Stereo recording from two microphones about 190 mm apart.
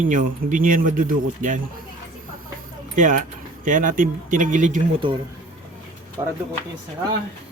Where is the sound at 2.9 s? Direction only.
45° right (ahead or behind).